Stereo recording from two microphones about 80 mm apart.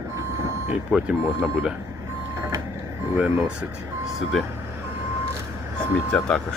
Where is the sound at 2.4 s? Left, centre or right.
Right.